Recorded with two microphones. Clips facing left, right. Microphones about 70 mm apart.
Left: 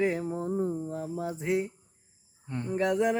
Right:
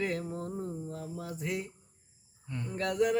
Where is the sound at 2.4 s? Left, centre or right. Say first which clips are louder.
Left 6 dB; left.